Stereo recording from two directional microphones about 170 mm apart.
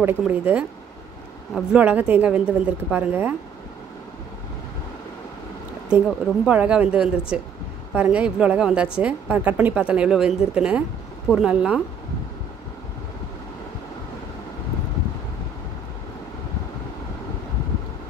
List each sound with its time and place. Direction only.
0.0 s a woman's voice: 10° right (ahead or behind)
5.9 s a woman's voice: 5° right (ahead or behind)